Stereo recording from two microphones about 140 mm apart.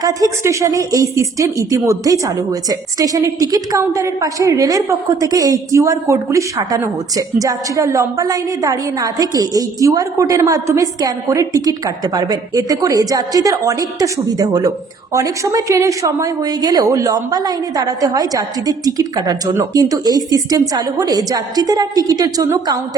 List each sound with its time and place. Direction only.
0.0 s a woman's voice: 25° right (ahead or behind)